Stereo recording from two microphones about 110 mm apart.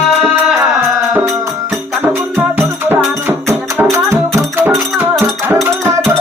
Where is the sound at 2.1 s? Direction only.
20° right (ahead or behind).